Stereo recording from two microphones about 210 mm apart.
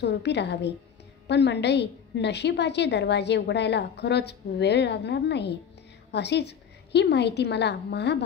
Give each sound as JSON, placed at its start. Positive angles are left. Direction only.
{"t": 0.0, "sound": "a woman's voice", "side_deg": 55}